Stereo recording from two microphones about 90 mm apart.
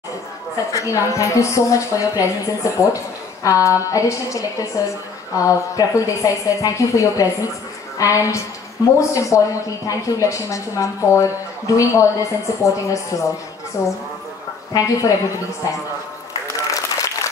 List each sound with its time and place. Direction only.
0.6 s speech: 35° left (ahead or behind)
16.5 s applause: 40° left (ahead or behind)